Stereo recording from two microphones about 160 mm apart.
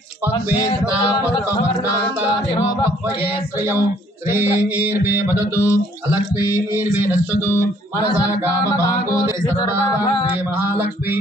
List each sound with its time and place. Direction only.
4.3 s mantra: 15° right (ahead or behind)
8.6 s music: 20° left (ahead or behind)
10.6 s mantra: 15° right (ahead or behind)